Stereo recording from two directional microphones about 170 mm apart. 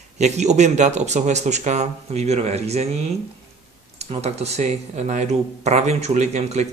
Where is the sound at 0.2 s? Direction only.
40° right (ahead or behind).